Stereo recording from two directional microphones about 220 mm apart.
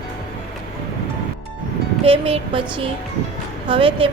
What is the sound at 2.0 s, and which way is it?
A woman's voice, 25° right (ahead or behind).